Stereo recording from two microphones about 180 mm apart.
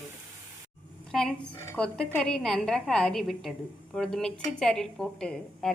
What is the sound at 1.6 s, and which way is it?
Stir, 10° left (ahead or behind).